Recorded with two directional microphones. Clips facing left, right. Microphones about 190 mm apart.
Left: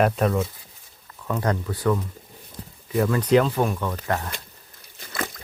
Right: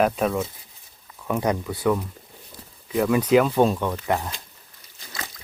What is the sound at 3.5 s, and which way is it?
Speech, 25° right (ahead or behind).